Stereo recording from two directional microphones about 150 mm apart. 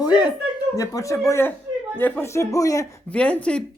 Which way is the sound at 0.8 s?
20° left (ahead or behind).